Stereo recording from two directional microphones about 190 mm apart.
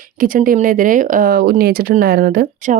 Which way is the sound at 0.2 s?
45° right (ahead or behind).